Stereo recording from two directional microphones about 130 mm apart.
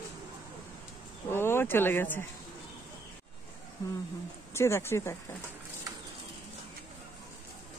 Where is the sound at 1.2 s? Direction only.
20° left (ahead or behind).